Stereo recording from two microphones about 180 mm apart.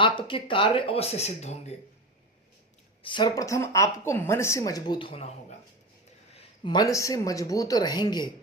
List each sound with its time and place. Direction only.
0.0 s speech: 30° left (ahead or behind)
3.0 s speech: 25° left (ahead or behind)